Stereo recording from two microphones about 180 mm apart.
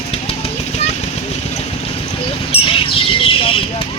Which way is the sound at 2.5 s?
30° left (ahead or behind).